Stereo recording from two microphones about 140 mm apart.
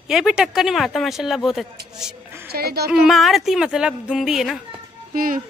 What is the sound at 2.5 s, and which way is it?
Speech, 90° right.